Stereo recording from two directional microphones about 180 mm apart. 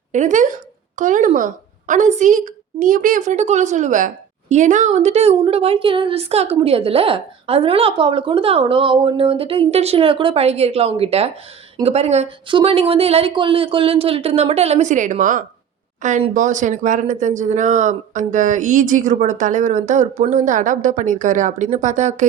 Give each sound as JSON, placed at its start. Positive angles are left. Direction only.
{"t": 0.1, "sound": "speech", "side_deg": -45}